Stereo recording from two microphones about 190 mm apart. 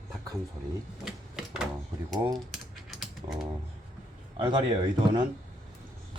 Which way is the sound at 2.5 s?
Centre (ahead or behind).